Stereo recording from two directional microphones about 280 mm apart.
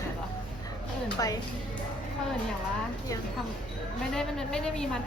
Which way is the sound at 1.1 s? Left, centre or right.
Centre.